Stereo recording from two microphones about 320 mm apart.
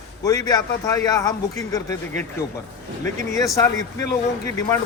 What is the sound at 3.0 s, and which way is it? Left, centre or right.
Speech, right.